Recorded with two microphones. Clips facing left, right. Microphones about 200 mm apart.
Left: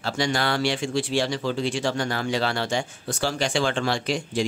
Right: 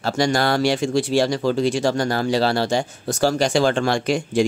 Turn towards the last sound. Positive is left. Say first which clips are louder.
# right 6 dB
turn(degrees=-50)  # may be behind; listen again after turning